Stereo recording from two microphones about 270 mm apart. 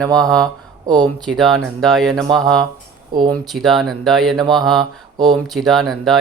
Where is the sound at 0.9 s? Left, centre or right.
Centre.